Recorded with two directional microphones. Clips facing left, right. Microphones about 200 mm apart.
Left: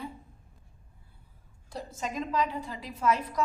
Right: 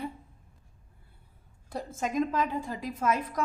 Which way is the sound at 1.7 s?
50° right (ahead or behind).